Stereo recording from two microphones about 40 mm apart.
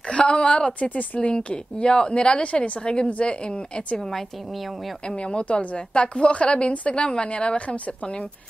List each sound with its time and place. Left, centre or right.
0.1 s a woman's voice: left
0.7 s speech: left
1.5 s a woman's voice: left
4.0 s a woman's voice: centre
5.0 s a woman's voice: left